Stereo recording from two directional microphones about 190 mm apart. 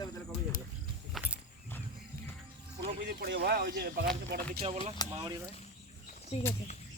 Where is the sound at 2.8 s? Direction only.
55° right (ahead or behind).